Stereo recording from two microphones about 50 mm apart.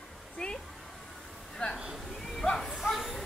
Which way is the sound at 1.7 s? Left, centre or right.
Centre.